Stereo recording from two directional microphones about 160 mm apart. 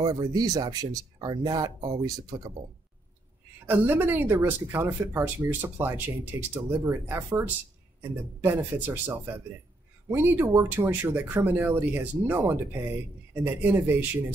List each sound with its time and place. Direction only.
0.0 s speech: 25° right (ahead or behind)
3.6 s speech: 10° right (ahead or behind)